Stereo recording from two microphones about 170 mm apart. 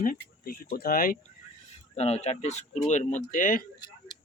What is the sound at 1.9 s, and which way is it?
Speech, 40° left (ahead or behind).